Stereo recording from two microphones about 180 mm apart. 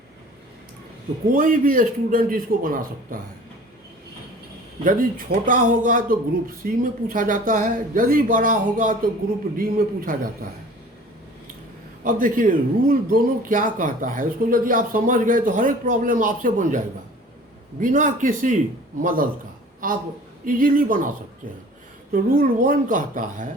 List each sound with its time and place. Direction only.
1.3 s a man's voice: 50° right (ahead or behind)
4.8 s a man's voice: 50° right (ahead or behind)
12.0 s a man's voice: 50° right (ahead or behind)
22.1 s a man's voice: 50° right (ahead or behind)